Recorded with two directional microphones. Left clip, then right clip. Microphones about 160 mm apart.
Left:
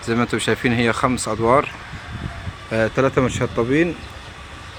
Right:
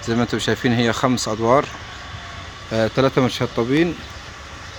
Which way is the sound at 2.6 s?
15° right (ahead or behind).